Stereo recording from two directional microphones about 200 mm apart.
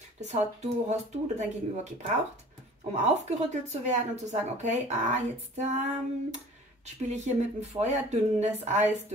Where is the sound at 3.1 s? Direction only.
35° right (ahead or behind).